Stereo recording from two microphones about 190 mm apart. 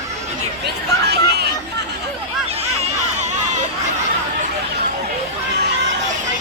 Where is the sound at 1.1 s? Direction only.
60° right (ahead or behind).